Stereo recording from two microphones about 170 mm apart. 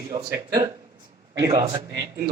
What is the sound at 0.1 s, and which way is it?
Speech, 20° right (ahead or behind).